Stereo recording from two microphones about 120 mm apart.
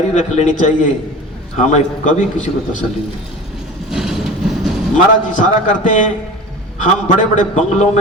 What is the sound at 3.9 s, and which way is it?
Train, 5° right (ahead or behind).